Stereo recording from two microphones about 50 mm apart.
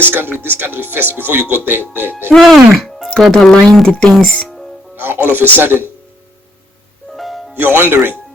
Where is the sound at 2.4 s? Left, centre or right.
Centre.